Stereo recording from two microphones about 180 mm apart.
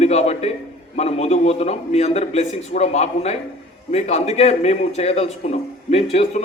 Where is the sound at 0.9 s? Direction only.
35° left (ahead or behind).